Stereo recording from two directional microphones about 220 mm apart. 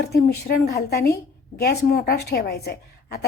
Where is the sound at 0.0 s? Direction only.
45° left (ahead or behind).